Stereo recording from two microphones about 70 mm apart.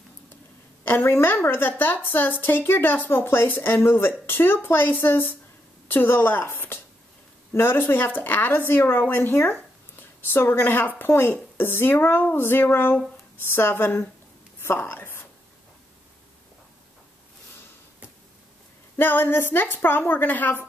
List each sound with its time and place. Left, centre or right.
0.8 s a woman's voice: left
14.6 s a sound: left
18.9 s speech: left